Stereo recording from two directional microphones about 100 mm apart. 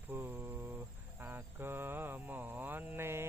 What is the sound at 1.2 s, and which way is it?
Mantra, 20° right (ahead or behind).